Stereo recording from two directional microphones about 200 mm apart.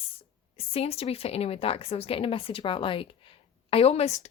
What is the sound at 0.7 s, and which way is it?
A woman's voice, 30° left (ahead or behind).